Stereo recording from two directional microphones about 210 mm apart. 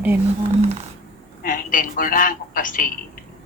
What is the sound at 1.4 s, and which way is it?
A woman's voice, 40° left (ahead or behind).